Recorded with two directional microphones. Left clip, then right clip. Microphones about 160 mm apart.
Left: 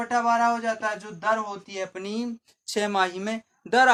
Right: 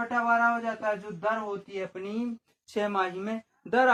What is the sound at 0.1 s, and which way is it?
Speech, 20° left (ahead or behind).